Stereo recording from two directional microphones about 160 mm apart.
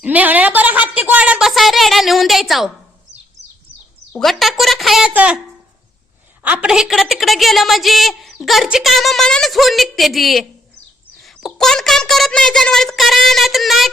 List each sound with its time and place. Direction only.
0.0 s a woman's voice: 10° right (ahead or behind)
4.1 s speech: centre (ahead or behind)
6.4 s a woman's voice: 10° right (ahead or behind)